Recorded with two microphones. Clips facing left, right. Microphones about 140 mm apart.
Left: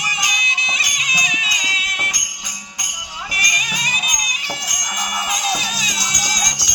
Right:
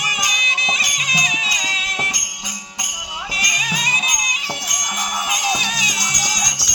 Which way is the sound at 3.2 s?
25° right (ahead or behind).